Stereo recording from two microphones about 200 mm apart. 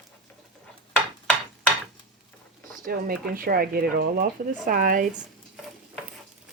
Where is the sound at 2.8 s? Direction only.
45° right (ahead or behind).